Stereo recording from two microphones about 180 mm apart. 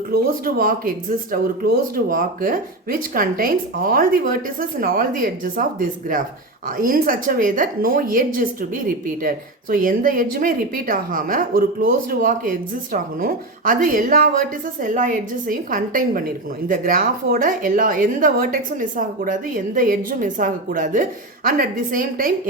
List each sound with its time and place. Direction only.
0.1 s a woman's voice: 55° right (ahead or behind)